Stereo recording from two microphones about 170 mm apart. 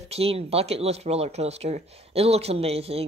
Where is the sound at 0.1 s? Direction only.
35° right (ahead or behind).